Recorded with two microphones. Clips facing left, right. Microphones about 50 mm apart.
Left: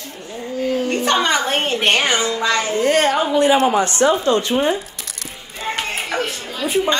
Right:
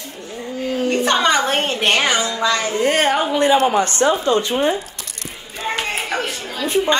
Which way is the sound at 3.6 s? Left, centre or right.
Right.